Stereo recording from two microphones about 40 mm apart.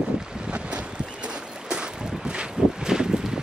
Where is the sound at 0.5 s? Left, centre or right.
Right.